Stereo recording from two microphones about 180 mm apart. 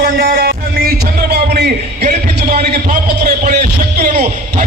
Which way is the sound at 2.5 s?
35° right (ahead or behind).